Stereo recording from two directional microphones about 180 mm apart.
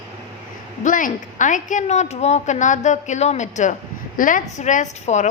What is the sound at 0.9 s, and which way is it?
A woman's voice, 45° left (ahead or behind).